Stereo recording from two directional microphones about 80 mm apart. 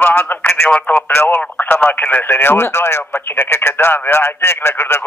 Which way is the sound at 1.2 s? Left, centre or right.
Left.